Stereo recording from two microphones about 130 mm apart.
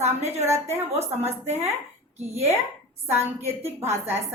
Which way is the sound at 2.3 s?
55° right (ahead or behind).